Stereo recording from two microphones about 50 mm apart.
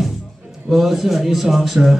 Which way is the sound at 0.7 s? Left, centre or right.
Centre.